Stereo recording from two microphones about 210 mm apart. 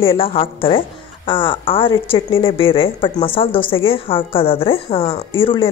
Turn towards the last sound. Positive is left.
turn(degrees=25)  # may be behind; listen again after turning